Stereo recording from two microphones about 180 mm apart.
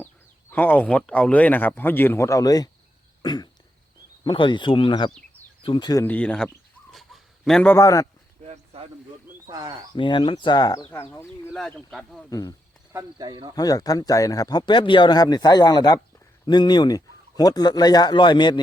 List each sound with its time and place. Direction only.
0.5 s speech: 10° left (ahead or behind)
6.1 s speech: 5° left (ahead or behind)
6.9 s a sound: centre (ahead or behind); by 8.0 s 15° left (ahead or behind)
8.4 s a sound: 35° right (ahead or behind)
9.5 s speech: 20° right (ahead or behind)
9.9 s speech: 25° left (ahead or behind)
11.5 s speech: centre (ahead or behind)
12.3 s speech: 20° left (ahead or behind)
12.9 s speech: 20° right (ahead or behind)
13.6 s speech: 20° left (ahead or behind)